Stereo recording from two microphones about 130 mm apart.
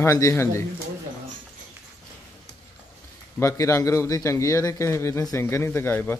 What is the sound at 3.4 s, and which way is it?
A man's voice, 25° left (ahead or behind).